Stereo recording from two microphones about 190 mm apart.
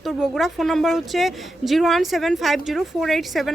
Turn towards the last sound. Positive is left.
turn(degrees=0)  # may be behind; listen again after turning